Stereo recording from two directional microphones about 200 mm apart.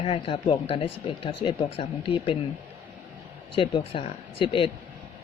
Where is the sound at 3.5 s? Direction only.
25° left (ahead or behind).